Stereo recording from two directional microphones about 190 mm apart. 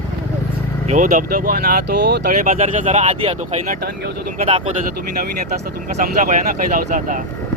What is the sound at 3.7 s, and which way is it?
Speech, 55° right (ahead or behind).